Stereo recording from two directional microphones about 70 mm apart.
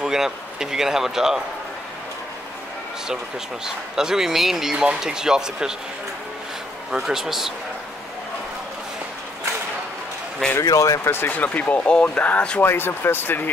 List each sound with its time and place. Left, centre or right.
0.0 s speech: centre
3.6 s a man's voice: centre
6.9 s a man's voice: centre
10.6 s speech: left
11.1 s speech: left
12.6 s speech: left